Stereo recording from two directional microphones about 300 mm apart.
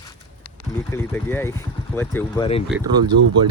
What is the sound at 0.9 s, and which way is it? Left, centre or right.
Speech, centre.